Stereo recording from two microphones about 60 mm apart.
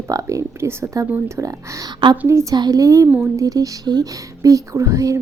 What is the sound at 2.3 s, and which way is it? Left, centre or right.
Speech, right.